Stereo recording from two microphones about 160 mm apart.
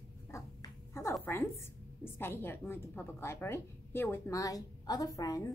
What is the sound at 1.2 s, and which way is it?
A woman's voice, 15° left (ahead or behind).